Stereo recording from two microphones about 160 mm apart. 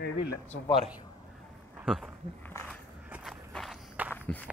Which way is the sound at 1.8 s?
Centre (ahead or behind).